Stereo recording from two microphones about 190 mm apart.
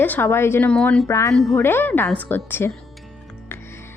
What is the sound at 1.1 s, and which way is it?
Speech, 15° left (ahead or behind).